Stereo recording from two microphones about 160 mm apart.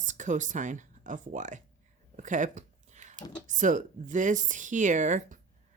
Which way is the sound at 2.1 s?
50° right (ahead or behind).